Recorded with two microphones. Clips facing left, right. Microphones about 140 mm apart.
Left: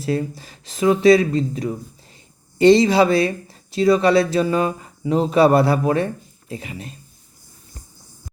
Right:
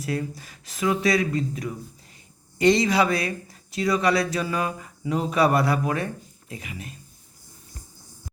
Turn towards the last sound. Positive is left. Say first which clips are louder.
# left 6 dB
turn(degrees=30)  # may be behind; listen again after turning